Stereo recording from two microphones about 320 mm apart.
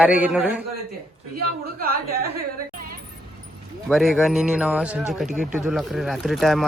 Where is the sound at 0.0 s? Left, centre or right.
Centre.